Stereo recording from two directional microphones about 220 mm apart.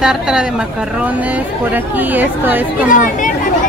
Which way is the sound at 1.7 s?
10° right (ahead or behind).